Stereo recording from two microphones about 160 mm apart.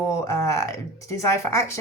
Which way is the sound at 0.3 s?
20° left (ahead or behind).